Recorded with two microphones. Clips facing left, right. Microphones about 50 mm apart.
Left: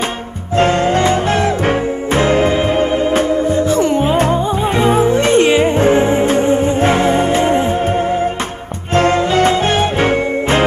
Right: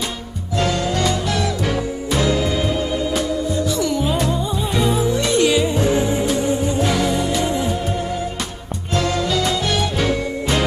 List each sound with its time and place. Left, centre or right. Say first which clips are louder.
0.6 s music: left 7 dB; left
8.9 s music: left 8 dB; left